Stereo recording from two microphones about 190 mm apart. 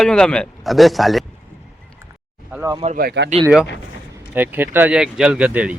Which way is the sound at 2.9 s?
55° right (ahead or behind).